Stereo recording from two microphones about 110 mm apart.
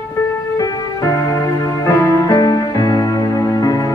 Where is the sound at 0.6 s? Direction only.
30° left (ahead or behind).